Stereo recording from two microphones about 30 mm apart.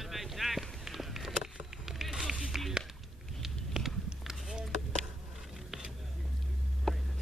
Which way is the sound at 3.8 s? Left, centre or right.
Centre.